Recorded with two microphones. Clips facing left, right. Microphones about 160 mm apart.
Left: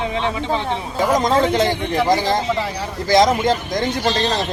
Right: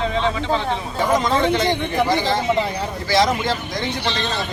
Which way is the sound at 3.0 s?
45° left (ahead or behind).